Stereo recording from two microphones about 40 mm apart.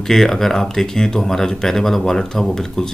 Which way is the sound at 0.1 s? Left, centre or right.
Centre.